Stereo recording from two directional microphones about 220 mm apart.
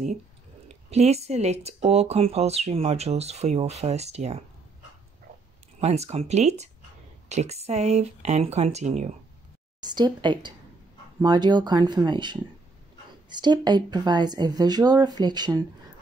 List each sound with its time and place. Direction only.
0.7 s speech: 30° right (ahead or behind)
5.8 s speech: 30° right (ahead or behind)
9.8 s speech: 20° right (ahead or behind)